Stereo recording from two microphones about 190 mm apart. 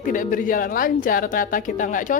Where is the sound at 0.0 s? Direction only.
45° left (ahead or behind).